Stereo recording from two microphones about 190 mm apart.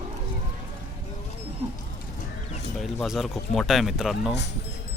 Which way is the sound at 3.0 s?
Centre (ahead or behind).